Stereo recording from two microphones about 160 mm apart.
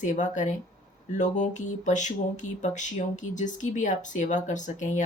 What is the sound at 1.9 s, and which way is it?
Speech, 50° left (ahead or behind).